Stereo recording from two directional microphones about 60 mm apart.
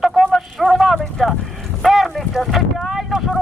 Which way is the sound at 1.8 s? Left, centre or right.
Centre.